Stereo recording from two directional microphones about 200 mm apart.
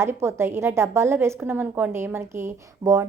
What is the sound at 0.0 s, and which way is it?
A woman's voice, 15° right (ahead or behind).